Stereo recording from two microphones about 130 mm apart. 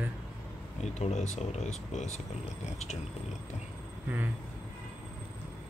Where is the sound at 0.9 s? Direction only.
60° left (ahead or behind).